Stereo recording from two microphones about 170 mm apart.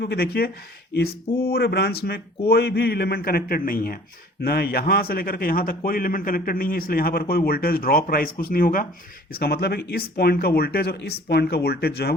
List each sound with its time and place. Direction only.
0.0 s a man's voice: 65° left (ahead or behind)